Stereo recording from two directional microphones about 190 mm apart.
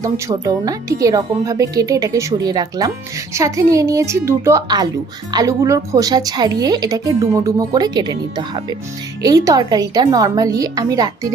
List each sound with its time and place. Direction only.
0.0 s speech: 20° right (ahead or behind)